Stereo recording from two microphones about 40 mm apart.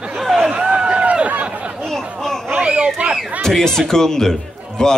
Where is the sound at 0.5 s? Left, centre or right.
Right.